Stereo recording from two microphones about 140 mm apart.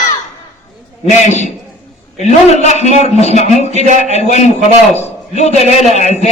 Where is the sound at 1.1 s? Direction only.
55° left (ahead or behind).